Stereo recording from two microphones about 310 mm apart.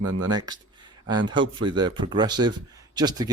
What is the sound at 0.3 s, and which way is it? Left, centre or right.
Speech, centre.